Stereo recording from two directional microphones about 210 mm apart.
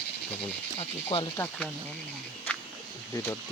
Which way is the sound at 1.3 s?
10° left (ahead or behind).